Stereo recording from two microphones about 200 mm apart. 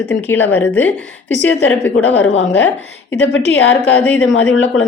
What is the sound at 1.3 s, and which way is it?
A woman's voice, 65° left (ahead or behind).